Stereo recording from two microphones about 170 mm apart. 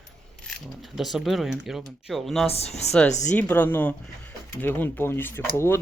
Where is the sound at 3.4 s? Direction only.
10° left (ahead or behind).